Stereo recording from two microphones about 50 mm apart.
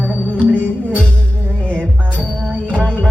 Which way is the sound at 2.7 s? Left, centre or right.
Left.